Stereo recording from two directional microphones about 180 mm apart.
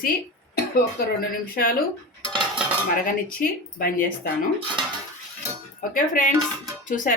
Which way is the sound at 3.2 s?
50° left (ahead or behind).